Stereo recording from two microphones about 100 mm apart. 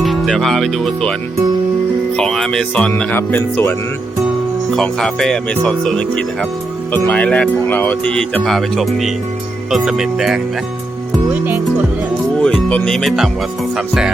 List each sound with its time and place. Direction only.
0.0 s speech: centre (ahead or behind)
2.1 s speech: 10° left (ahead or behind)
4.7 s speech: 5° left (ahead or behind)
12.4 s speech: 10° left (ahead or behind)